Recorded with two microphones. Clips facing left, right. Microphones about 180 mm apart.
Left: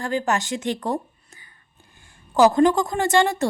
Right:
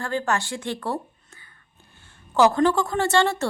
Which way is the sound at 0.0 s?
15° left (ahead or behind).